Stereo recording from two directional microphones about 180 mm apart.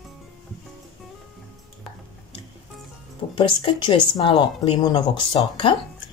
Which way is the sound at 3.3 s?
25° left (ahead or behind).